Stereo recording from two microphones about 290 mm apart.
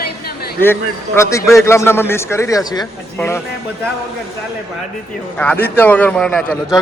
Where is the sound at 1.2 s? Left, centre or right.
Centre.